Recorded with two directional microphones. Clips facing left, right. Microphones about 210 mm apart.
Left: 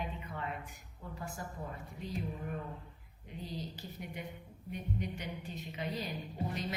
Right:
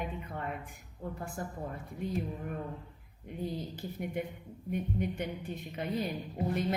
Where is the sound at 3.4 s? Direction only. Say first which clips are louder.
Right 6 dB; 55° right (ahead or behind).